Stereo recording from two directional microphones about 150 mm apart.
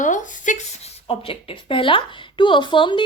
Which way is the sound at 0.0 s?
60° left (ahead or behind).